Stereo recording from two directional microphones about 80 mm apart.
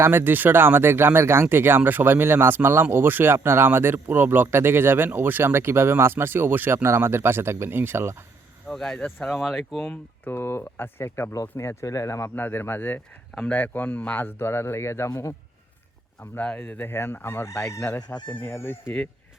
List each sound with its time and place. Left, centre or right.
0.0 s speech: right
8.6 s speech: centre
10.3 s speech: left
12.4 s speech: left
16.2 s speech: left
18.2 s speech: left
18.4 s speech: left